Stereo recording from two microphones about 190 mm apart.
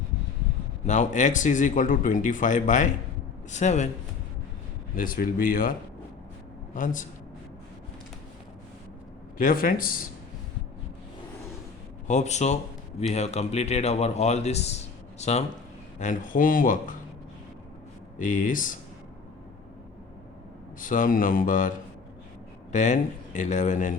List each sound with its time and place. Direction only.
0.9 s speech: 40° left (ahead or behind)
4.9 s speech: 45° left (ahead or behind)
6.7 s speech: 45° left (ahead or behind)
9.4 s speech: 45° left (ahead or behind)
12.0 s speech: 40° left (ahead or behind)
18.2 s speech: 45° left (ahead or behind)
20.8 s speech: 45° left (ahead or behind)
22.7 s speech: 40° left (ahead or behind)